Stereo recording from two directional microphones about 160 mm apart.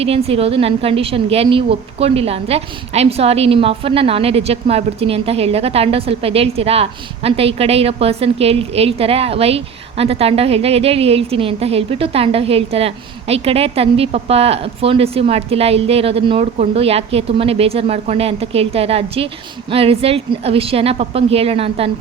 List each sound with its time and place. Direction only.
0.0 s a woman's voice: 40° right (ahead or behind)